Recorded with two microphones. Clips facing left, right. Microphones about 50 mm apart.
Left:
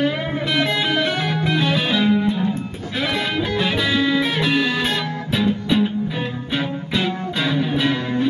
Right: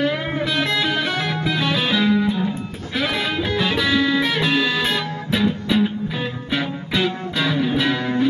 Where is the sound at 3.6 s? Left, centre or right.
Centre.